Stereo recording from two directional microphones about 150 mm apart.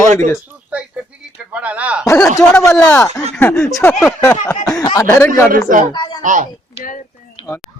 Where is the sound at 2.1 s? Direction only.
20° left (ahead or behind).